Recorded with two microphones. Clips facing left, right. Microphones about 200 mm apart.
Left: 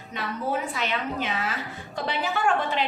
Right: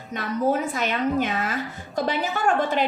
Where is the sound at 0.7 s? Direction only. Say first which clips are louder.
Right 6 dB; 45° right (ahead or behind).